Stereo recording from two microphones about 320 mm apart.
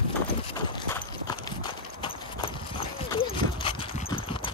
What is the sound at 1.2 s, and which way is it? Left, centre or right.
Clip-clop, centre.